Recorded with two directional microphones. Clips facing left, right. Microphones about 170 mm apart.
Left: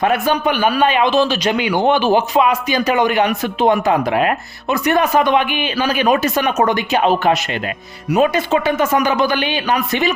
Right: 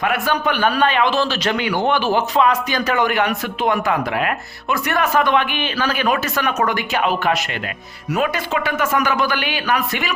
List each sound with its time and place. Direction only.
0.3 s a man's voice: 15° left (ahead or behind)